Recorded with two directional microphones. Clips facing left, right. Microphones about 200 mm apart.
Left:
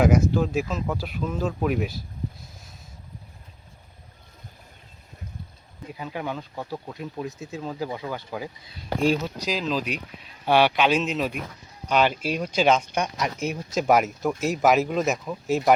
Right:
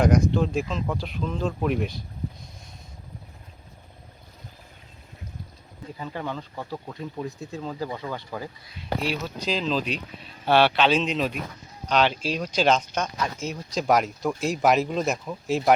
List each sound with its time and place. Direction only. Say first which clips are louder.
0.0 s speech: left 1 dB; 5° left (ahead or behind)
5.9 s speech: left 1 dB; 10° left (ahead or behind)
8.8 s speech: left 6 dB; 45° left (ahead or behind)
9.5 s speech: right 1 dB; 10° left (ahead or behind)
12.1 s speech: left 1 dB; 55° left (ahead or behind)
12.4 s speech: left 1 dB; 5° left (ahead or behind)